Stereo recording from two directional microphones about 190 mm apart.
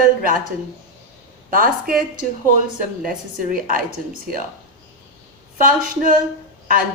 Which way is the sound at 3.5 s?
45° right (ahead or behind).